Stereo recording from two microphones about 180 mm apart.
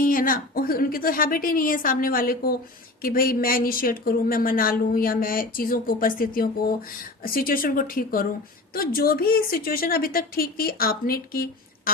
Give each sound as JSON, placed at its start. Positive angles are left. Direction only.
{"t": 0.0, "sound": "a woman's voice", "side_deg": 50}